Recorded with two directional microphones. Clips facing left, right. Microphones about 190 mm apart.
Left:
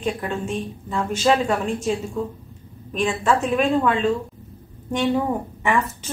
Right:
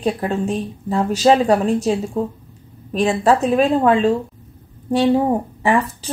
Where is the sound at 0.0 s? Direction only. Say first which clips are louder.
Right 5 dB; 35° right (ahead or behind).